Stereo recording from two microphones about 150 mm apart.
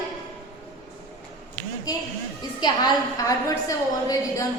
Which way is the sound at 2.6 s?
25° left (ahead or behind).